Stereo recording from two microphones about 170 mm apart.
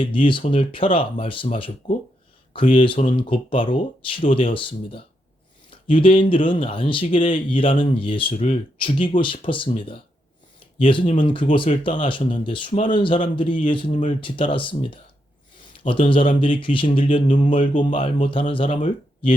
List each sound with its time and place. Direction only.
0.0 s speech: 30° left (ahead or behind)